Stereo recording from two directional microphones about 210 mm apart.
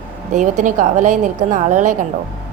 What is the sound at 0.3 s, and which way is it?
A woman's voice, 35° right (ahead or behind).